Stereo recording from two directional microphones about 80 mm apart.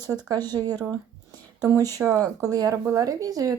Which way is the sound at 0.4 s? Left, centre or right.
Right.